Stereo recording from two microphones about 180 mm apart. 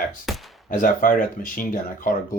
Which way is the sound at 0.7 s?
50° left (ahead or behind).